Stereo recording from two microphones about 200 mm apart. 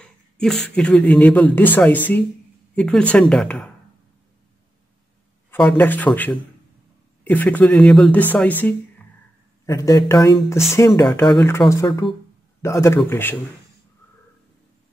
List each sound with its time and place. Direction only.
0.0 s speech: centre (ahead or behind)
5.5 s speech: 5° left (ahead or behind)